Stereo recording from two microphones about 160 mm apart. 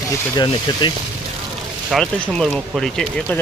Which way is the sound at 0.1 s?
25° left (ahead or behind).